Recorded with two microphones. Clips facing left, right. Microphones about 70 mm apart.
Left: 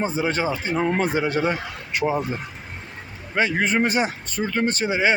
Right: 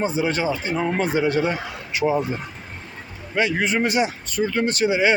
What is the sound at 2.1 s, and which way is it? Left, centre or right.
Speech, centre.